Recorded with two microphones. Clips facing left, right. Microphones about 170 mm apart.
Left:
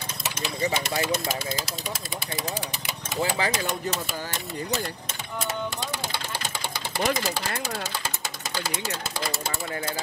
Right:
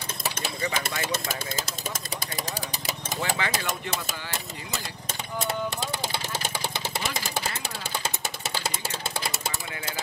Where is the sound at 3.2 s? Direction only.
30° left (ahead or behind).